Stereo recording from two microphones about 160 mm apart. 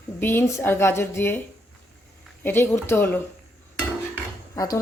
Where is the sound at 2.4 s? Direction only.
15° left (ahead or behind).